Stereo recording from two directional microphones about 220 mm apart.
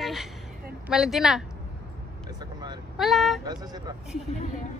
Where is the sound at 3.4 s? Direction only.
15° right (ahead or behind).